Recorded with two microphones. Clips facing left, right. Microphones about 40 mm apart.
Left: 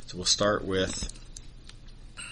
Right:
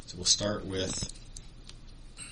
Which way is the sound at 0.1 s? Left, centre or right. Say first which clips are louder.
Left 2 dB; left.